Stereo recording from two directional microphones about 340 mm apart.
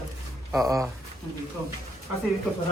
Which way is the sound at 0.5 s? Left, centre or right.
Centre.